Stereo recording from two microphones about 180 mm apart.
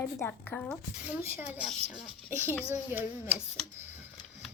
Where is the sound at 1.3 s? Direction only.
10° right (ahead or behind).